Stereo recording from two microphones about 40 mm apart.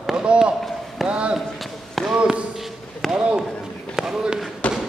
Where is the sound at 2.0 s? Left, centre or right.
Centre.